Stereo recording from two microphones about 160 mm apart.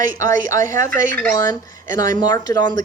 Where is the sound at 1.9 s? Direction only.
20° left (ahead or behind).